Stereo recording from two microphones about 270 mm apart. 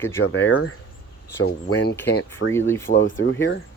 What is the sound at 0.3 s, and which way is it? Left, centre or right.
Speech, left.